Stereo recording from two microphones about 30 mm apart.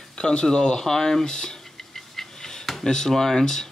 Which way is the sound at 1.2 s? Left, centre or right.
Left.